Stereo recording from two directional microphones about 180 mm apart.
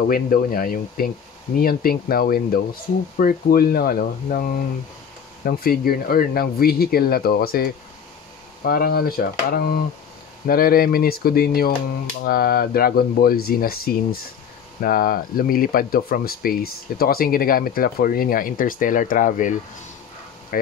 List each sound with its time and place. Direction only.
0.1 s speech: 55° left (ahead or behind)
5.4 s speech: 55° left (ahead or behind)
20.5 s speech: 50° left (ahead or behind)